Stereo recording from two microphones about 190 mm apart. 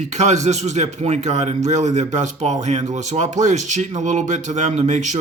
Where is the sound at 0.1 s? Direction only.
35° right (ahead or behind).